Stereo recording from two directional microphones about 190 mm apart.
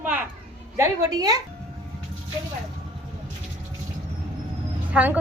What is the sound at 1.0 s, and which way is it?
Speech, 20° right (ahead or behind).